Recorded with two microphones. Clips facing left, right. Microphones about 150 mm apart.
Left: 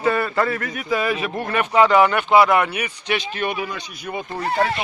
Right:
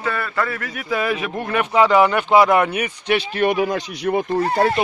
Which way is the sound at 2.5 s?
40° right (ahead or behind).